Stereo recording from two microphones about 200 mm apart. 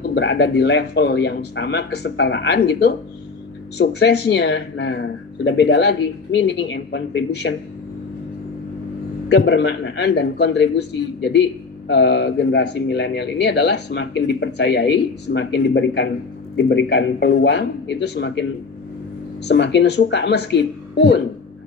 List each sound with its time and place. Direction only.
0.0 s speech: 60° left (ahead or behind)
9.3 s speech: 60° left (ahead or behind)